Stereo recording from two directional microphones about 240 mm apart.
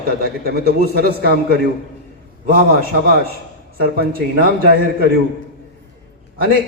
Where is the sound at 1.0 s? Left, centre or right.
Right.